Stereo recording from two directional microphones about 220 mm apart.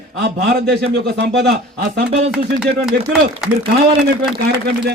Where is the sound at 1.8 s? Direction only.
30° right (ahead or behind).